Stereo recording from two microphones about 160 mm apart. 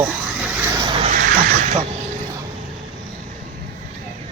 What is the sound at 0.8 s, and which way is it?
Vehicle, 35° right (ahead or behind).